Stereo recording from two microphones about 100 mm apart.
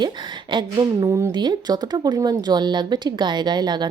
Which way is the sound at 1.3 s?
50° right (ahead or behind).